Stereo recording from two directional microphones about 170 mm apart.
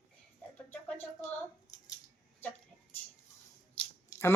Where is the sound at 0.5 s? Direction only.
10° left (ahead or behind).